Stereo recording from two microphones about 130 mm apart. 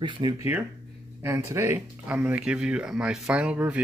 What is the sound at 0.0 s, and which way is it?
Speech, 35° right (ahead or behind).